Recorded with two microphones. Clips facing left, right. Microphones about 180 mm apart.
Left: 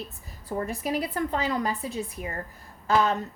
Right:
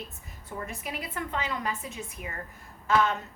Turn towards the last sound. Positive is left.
turn(degrees=35)  # may be behind; listen again after turning